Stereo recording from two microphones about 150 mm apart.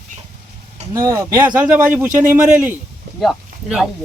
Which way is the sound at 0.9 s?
20° right (ahead or behind).